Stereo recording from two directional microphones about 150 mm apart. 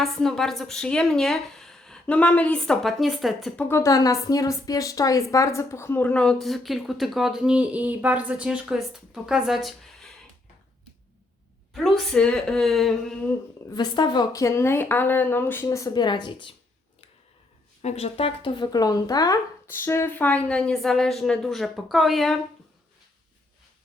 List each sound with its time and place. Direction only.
0.0 s a woman's voice: centre (ahead or behind)
3.6 s a woman's voice: 15° left (ahead or behind); by 10.1 s centre (ahead or behind)
11.7 s a woman's voice: centre (ahead or behind)
13.7 s speech: 30° left (ahead or behind); by 15.6 s 15° left (ahead or behind)
15.6 s a woman's voice: 25° left (ahead or behind)
17.8 s speech: 45° left (ahead or behind); by 22.4 s centre (ahead or behind)